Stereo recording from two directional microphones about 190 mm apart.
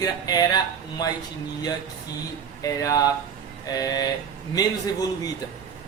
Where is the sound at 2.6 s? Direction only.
20° left (ahead or behind).